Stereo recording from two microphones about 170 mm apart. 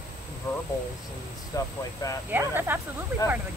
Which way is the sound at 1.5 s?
20° left (ahead or behind).